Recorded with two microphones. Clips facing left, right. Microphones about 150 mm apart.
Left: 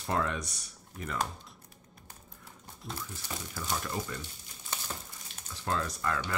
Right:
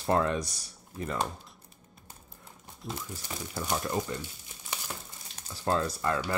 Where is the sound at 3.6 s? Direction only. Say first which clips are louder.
Right 4 dB; 20° right (ahead or behind).